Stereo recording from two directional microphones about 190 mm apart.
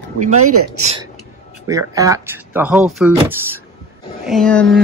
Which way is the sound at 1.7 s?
15° right (ahead or behind).